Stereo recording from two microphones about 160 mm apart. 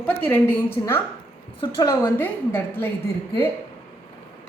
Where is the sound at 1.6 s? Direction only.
25° left (ahead or behind).